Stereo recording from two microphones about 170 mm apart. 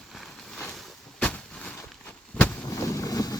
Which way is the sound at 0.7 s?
5° left (ahead or behind).